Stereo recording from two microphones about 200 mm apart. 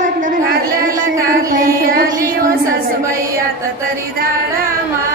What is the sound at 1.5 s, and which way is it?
Music, 45° right (ahead or behind).